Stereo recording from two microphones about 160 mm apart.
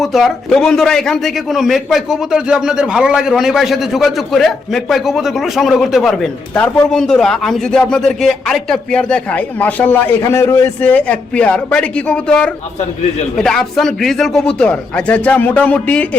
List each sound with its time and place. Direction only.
0.0 s a man's voice: centre (ahead or behind)